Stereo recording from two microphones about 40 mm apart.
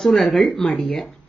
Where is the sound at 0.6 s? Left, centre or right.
Centre.